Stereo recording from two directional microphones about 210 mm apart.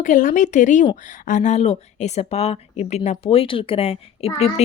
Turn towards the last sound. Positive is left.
turn(degrees=30)  # may be behind; listen again after turning